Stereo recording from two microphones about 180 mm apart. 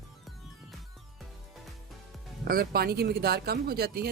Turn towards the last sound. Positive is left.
turn(degrees=-60)  # may be behind; listen again after turning